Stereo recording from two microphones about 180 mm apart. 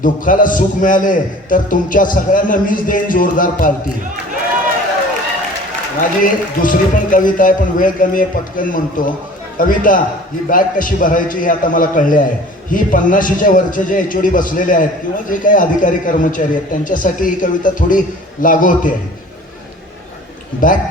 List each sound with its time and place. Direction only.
0.0 s a man's voice: 50° left (ahead or behind)
6.0 s a man's voice: 50° left (ahead or behind)
20.6 s a man's voice: 50° left (ahead or behind)